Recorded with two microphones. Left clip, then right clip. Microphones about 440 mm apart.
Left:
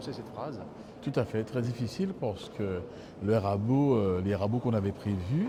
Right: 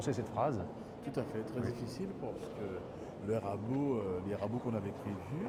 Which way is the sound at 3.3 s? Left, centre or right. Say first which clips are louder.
Left 9 dB; left.